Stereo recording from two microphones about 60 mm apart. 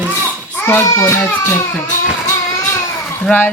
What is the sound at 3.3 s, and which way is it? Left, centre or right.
Speech, centre.